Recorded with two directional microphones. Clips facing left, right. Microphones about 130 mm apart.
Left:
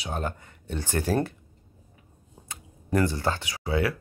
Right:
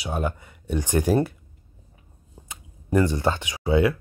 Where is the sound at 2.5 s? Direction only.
15° right (ahead or behind).